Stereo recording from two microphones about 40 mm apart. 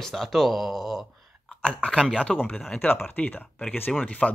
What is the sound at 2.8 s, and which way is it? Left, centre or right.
Speech, left.